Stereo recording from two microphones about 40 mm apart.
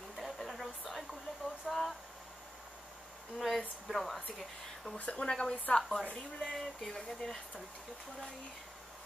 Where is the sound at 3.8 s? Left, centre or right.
Centre.